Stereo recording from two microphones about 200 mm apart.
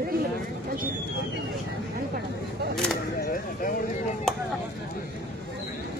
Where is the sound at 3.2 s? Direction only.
45° left (ahead or behind).